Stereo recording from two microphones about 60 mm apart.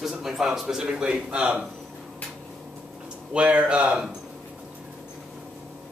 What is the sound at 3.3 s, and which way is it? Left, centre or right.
Speech, right.